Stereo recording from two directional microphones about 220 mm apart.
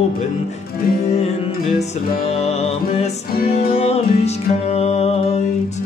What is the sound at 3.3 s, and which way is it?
Music, 40° left (ahead or behind).